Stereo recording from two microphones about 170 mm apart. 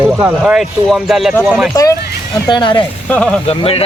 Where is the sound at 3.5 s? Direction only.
35° left (ahead or behind).